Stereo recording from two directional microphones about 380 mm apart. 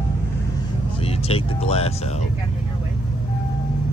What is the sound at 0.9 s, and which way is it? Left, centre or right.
Music, centre.